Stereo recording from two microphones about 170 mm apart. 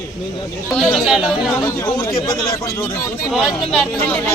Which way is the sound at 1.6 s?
15° left (ahead or behind).